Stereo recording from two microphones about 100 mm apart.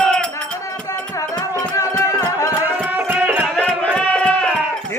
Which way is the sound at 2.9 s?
20° right (ahead or behind).